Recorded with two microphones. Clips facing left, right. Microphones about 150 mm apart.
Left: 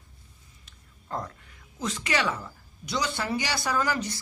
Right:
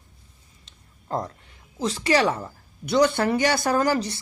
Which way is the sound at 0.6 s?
35° right (ahead or behind).